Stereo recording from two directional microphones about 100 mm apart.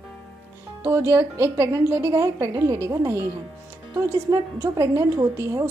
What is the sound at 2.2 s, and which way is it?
A woman's voice, 35° right (ahead or behind).